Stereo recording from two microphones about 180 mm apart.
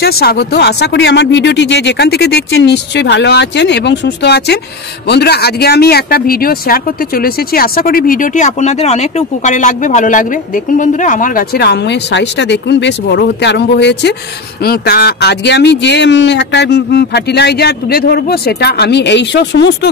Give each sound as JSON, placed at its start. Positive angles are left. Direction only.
{"t": 0.0, "sound": "speech", "side_deg": 60}
{"t": 14.6, "sound": "speech", "side_deg": 60}